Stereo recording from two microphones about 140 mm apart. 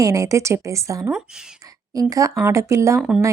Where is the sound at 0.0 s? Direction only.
25° right (ahead or behind).